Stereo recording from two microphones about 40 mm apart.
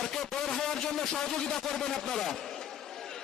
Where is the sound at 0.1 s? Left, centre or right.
Centre.